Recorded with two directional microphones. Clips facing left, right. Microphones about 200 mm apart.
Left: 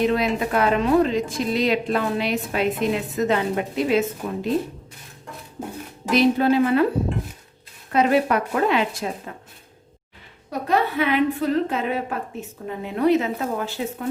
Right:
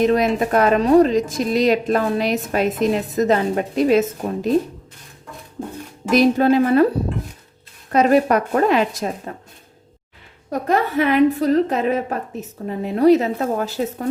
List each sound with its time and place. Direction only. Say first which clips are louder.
0.1 s speech: right 4 dB; 45° right (ahead or behind)
6.1 s a woman's voice: right 3 dB; 45° right (ahead or behind)
7.9 s a woman's voice: right 4 dB; 45° right (ahead or behind)
10.5 s speech: right 3 dB; 45° right (ahead or behind)